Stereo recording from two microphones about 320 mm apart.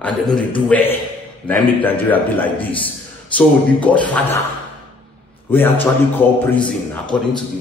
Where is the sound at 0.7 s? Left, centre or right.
Centre.